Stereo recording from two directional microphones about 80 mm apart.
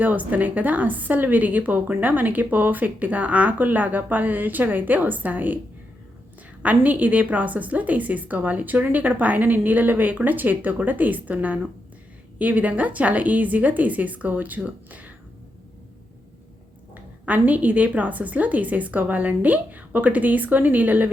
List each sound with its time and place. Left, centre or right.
0.0 s a woman's voice: right
6.6 s a woman's voice: centre
16.9 s a woman's voice: right